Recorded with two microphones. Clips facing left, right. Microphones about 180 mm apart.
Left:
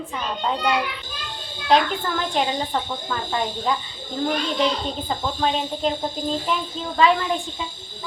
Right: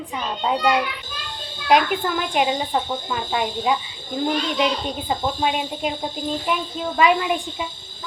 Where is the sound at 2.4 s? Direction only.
10° right (ahead or behind).